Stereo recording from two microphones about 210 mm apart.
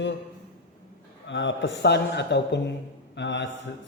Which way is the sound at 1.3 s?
60° left (ahead or behind).